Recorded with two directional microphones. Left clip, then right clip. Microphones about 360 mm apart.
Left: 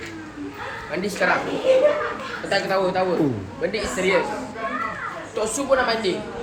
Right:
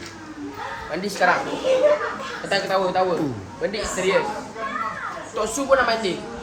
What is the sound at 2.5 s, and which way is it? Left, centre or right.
A woman's voice, right.